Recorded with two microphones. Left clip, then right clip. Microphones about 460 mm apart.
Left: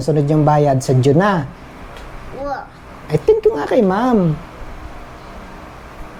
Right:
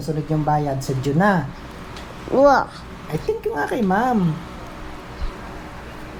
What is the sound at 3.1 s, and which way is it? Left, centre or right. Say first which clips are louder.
Speech: left 11 dB; left.